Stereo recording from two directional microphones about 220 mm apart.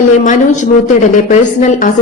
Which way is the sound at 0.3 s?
35° left (ahead or behind).